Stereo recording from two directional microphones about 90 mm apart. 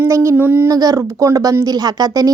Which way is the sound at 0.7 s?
40° right (ahead or behind).